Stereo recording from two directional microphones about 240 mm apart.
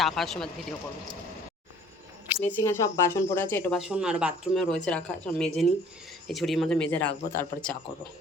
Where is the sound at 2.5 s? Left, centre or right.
Centre.